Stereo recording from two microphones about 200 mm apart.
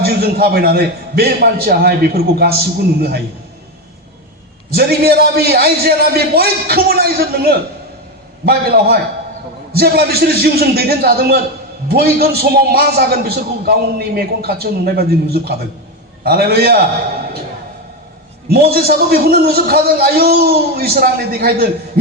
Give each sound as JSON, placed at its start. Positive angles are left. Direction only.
{"t": 0.0, "sound": "a man's voice", "side_deg": -50}
{"t": 4.7, "sound": "a man's voice", "side_deg": -50}
{"t": 8.4, "sound": "a man's voice", "side_deg": -50}
{"t": 18.4, "sound": "a man's voice", "side_deg": -50}